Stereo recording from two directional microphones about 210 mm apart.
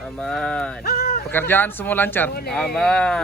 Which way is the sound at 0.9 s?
45° left (ahead or behind).